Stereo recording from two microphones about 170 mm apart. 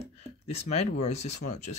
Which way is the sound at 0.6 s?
40° left (ahead or behind).